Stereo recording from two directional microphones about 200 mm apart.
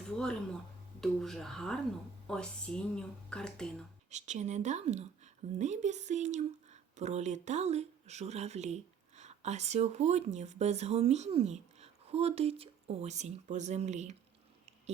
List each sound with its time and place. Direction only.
1.0 s speech: centre (ahead or behind)
4.1 s speech: 35° right (ahead or behind)